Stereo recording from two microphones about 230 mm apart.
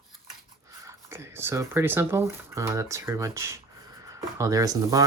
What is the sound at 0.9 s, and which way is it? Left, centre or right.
Speech, centre.